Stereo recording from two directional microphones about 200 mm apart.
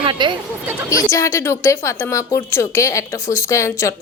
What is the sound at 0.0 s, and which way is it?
Speech, 25° right (ahead or behind).